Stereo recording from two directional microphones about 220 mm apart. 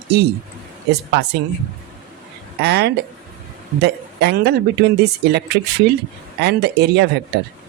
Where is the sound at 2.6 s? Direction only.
50° right (ahead or behind).